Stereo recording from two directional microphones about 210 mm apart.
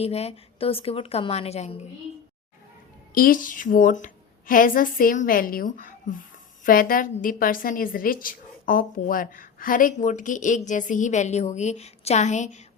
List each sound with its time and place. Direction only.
0.0 s a woman's voice: 30° left (ahead or behind)
3.2 s a woman's voice: 40° left (ahead or behind)